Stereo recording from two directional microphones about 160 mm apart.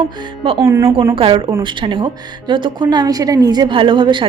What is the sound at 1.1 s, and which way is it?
A woman's voice, 35° right (ahead or behind).